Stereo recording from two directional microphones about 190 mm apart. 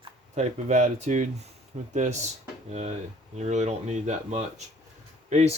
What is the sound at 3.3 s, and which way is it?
Speech, 35° right (ahead or behind).